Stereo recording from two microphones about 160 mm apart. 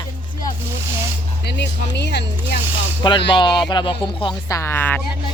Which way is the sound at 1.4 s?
90° left.